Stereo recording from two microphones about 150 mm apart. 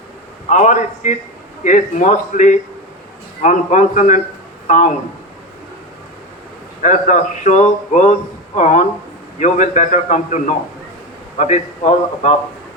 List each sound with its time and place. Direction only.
0.5 s a man's voice: 55° left (ahead or behind)
6.8 s a man's voice: 55° left (ahead or behind)